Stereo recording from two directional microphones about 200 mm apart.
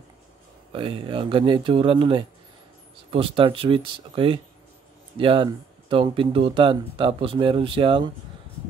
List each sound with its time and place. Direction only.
0.7 s speech: 25° right (ahead or behind)